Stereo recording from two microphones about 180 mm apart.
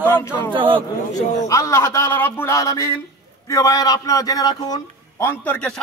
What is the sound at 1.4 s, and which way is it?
A man's voice, 15° left (ahead or behind).